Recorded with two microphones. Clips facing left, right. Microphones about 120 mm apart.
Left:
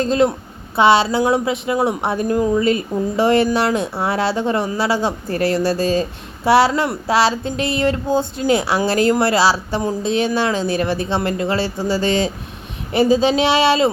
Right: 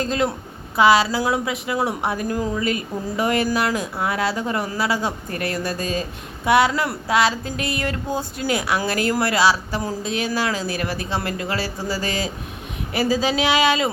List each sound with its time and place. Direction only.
0.0 s a woman's voice: 25° left (ahead or behind)